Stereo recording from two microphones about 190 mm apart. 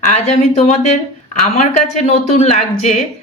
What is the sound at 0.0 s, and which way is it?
Speech, 35° left (ahead or behind).